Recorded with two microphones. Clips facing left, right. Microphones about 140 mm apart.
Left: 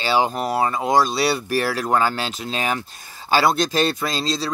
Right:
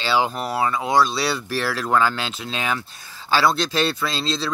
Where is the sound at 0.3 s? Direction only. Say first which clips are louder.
Left 3 dB; 20° left (ahead or behind).